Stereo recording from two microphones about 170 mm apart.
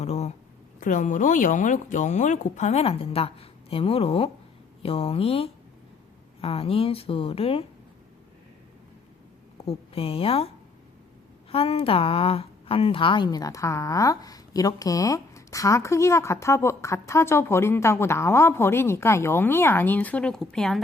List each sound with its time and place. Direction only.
0.0 s a sound: 40° left (ahead or behind)
0.8 s speech: 50° left (ahead or behind)
9.6 s speech: 35° left (ahead or behind)
11.5 s a woman's voice: 35° left (ahead or behind); by 20.8 s centre (ahead or behind)